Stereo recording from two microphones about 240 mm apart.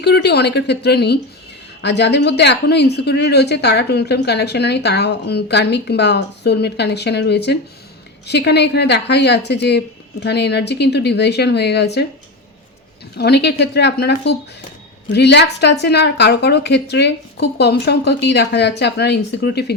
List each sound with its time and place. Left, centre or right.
0.0 s speech: left
13.1 s speech: left